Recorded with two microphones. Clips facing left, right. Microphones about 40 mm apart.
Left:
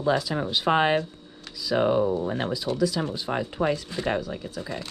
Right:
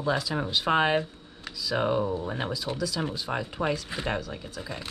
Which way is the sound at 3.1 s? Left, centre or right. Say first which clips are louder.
Left 3 dB; centre.